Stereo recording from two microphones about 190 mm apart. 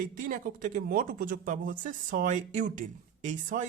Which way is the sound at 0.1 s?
45° right (ahead or behind).